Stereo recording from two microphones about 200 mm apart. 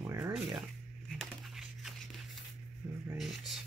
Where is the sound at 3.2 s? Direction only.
Centre (ahead or behind).